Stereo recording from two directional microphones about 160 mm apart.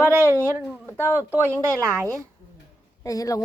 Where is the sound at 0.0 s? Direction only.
15° right (ahead or behind).